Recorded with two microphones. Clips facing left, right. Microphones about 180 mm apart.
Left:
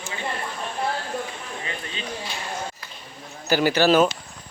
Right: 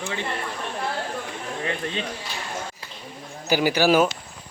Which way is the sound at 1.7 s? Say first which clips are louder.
Right 9 dB; 60° right (ahead or behind).